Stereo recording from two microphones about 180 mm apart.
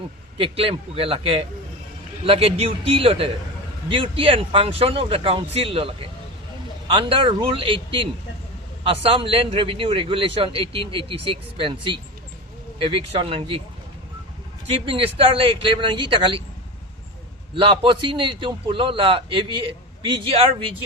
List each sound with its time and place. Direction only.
0.3 s a man's voice: 30° right (ahead or behind)
14.7 s a man's voice: 30° right (ahead or behind)
17.5 s a man's voice: 30° right (ahead or behind)